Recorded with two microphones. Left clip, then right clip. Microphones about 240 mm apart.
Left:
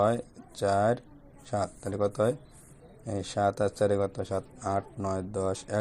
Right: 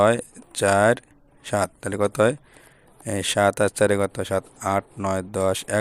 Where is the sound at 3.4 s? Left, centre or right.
Right.